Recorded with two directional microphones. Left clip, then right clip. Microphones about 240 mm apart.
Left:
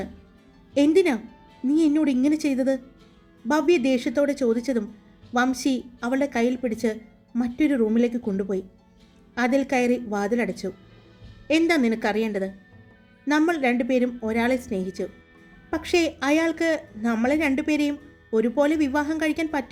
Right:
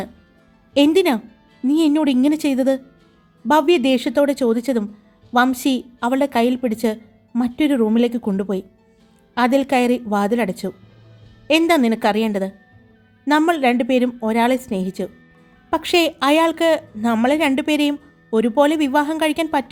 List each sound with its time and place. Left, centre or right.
0.8 s a woman's voice: right